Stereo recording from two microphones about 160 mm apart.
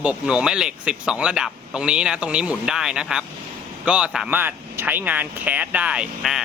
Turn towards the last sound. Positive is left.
turn(degrees=-5)  # may be behind; listen again after turning